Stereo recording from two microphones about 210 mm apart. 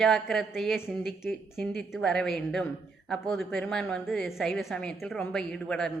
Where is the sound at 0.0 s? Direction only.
Centre (ahead or behind).